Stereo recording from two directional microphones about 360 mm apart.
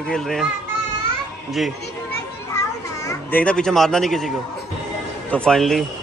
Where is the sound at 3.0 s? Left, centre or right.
Centre.